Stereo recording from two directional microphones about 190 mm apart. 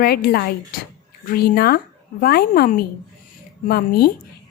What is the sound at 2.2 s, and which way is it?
Speech, 55° left (ahead or behind).